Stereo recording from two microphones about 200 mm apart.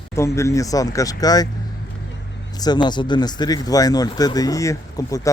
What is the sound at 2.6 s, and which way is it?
Speech, 20° left (ahead or behind).